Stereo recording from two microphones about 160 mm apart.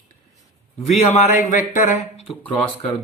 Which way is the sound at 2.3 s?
35° left (ahead or behind).